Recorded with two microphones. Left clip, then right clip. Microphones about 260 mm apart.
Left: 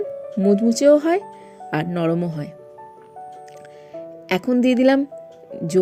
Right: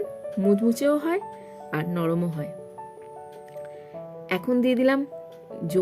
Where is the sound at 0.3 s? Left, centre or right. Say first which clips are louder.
Left 5 dB; centre.